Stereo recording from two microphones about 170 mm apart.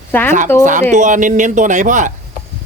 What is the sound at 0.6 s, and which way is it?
A man's voice, 45° right (ahead or behind).